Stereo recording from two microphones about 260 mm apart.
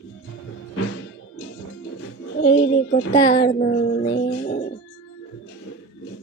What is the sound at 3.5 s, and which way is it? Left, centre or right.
Music, left.